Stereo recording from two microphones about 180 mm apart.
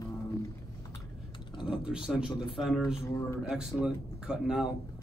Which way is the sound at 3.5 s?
5° right (ahead or behind).